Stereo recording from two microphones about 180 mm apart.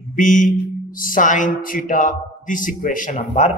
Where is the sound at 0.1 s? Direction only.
45° left (ahead or behind).